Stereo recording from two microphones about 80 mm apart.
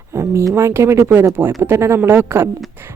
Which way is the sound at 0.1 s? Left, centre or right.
Right.